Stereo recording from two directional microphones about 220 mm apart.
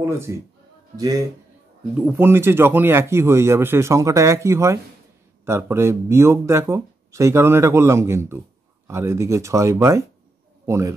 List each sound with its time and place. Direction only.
0.0 s a man's voice: 10° right (ahead or behind)